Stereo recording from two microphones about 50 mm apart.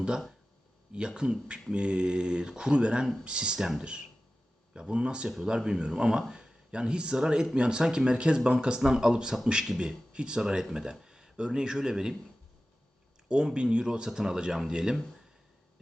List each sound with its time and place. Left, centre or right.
0.9 s speech: centre
13.2 s speech: centre